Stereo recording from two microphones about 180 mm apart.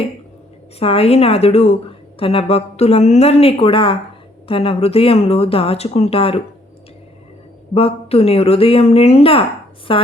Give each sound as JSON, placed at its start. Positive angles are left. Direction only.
{"t": 0.8, "sound": "speech", "side_deg": 35}
{"t": 7.7, "sound": "a woman's voice", "side_deg": 35}